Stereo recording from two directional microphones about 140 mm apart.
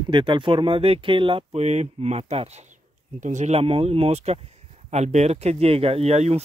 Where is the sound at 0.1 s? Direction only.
35° right (ahead or behind).